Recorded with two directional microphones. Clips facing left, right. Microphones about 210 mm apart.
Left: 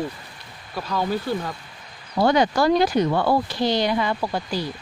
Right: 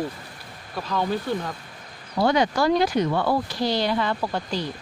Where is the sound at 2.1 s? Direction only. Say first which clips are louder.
Left 2 dB; 40° left (ahead or behind).